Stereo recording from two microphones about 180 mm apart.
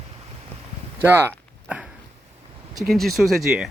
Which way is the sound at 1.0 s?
15° right (ahead or behind).